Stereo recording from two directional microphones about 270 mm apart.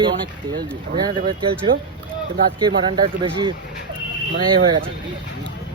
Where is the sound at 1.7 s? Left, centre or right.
Right.